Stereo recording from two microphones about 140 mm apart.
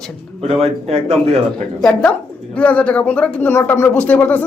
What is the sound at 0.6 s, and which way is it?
Speech, 45° right (ahead or behind).